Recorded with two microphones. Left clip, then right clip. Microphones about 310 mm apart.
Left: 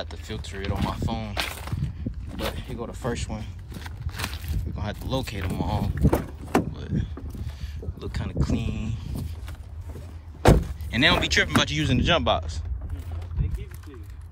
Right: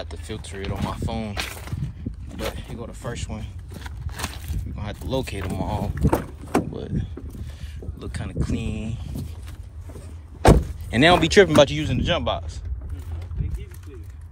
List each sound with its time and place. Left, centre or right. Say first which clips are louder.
0.0 s speech: right 1 dB; centre
6.0 s speech: right 2 dB; centre
6.5 s vehicle: right 1 dB; centre
8.0 s speech: even; centre
9.9 s vehicle: right 1 dB; centre
10.9 s speech: right 4 dB; centre
11.8 s speech: left 2 dB; centre
13.4 s a sound: left 1 dB; left